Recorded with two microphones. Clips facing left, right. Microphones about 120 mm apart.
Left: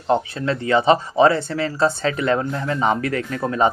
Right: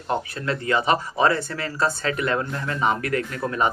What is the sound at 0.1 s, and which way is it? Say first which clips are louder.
Speech: left 6 dB; 30° left (ahead or behind).